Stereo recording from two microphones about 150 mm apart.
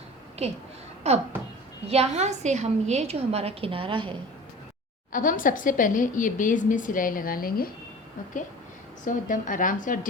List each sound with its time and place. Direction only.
0.4 s a woman's voice: 45° right (ahead or behind)
5.1 s a woman's voice: 65° left (ahead or behind)
9.0 s a woman's voice: 60° left (ahead or behind)